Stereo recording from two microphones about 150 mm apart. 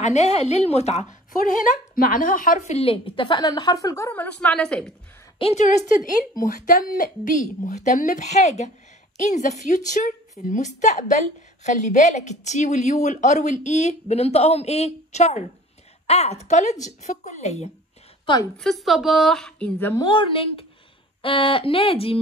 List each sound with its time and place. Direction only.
0.0 s a woman's voice: 45° left (ahead or behind)
2.0 s a woman's voice: 70° left (ahead or behind); by 4.1 s 20° left (ahead or behind)
4.1 s a woman's voice: 10° left (ahead or behind)
5.4 s a woman's voice: 45° left (ahead or behind)
6.3 s a woman's voice: 65° left (ahead or behind); by 17.6 s 45° left (ahead or behind)
18.2 s a woman's voice: 30° left (ahead or behind)
18.6 s a woman's voice: centre (ahead or behind)
19.8 s a woman's voice: 15° left (ahead or behind)
20.1 s a woman's voice: 35° left (ahead or behind)